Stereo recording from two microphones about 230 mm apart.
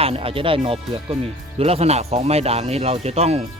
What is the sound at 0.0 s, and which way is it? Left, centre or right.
Speech, right.